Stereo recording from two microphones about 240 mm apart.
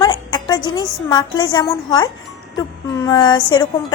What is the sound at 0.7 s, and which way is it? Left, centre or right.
A woman's voice, centre.